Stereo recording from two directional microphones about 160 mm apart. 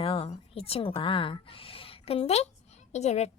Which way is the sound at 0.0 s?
35° left (ahead or behind).